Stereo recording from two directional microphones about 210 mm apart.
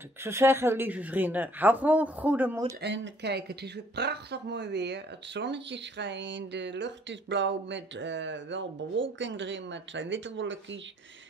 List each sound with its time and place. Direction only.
0.2 s speech: 10° right (ahead or behind)
2.8 s speech: 55° right (ahead or behind)